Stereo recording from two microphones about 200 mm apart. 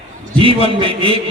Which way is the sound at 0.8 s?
25° right (ahead or behind).